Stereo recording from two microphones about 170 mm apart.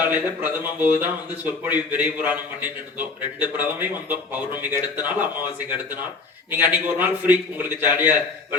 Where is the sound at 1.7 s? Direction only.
10° right (ahead or behind).